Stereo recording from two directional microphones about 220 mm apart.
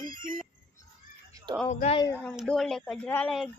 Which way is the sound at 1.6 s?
30° left (ahead or behind).